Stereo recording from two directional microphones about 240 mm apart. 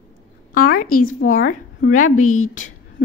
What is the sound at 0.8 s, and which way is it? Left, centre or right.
Speech, left.